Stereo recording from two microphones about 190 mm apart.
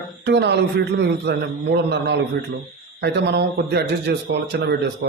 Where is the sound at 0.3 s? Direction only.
65° right (ahead or behind).